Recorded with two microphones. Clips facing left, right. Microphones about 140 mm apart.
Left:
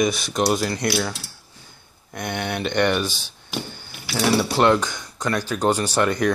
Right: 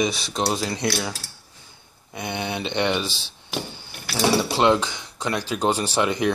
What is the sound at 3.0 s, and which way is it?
Speech, 30° right (ahead or behind).